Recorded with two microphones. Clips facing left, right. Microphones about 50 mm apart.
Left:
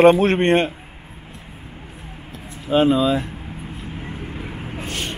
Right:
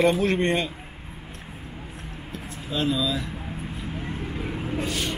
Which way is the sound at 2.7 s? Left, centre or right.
Left.